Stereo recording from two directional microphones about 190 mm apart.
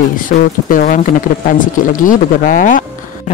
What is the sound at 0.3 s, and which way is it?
Speech, 50° left (ahead or behind).